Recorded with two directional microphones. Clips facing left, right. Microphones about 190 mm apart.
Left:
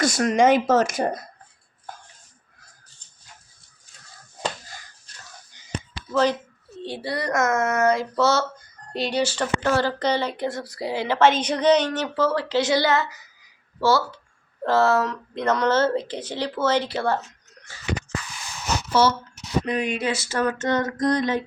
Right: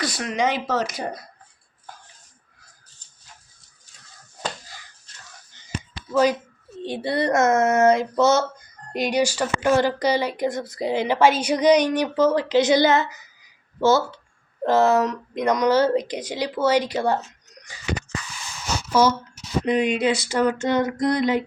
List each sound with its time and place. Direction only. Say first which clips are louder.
0.0 s speech: left 6 dB; 45° left (ahead or behind)
6.1 s speech: right 2 dB; 10° right (ahead or behind)
17.7 s a sound: right 1 dB; 15° right (ahead or behind)
19.0 s speech: right 2 dB; 10° right (ahead or behind)